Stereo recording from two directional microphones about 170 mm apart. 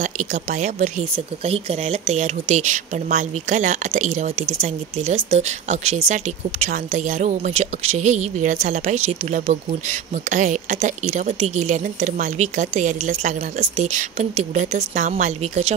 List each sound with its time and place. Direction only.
0.0 s speech: 50° right (ahead or behind)